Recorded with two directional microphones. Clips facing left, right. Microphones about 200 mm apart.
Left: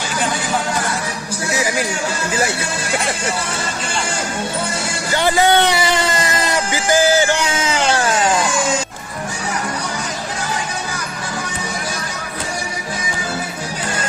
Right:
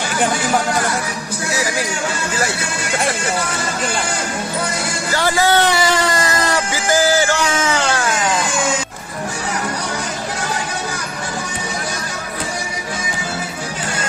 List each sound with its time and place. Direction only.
5.1 s music: 20° left (ahead or behind)